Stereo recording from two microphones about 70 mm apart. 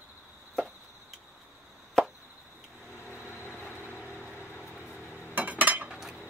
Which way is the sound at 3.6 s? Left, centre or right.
Left.